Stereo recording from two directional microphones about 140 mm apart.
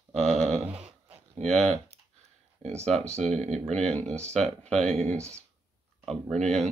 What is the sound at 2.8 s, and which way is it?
Speech, 5° left (ahead or behind).